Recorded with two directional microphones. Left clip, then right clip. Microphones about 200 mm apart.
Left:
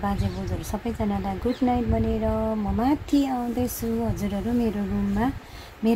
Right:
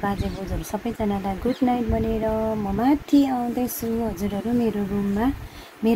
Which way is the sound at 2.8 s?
Centre (ahead or behind).